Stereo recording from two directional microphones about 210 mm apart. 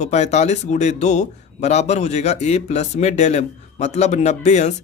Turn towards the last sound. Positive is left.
turn(degrees=35)  # may be behind; listen again after turning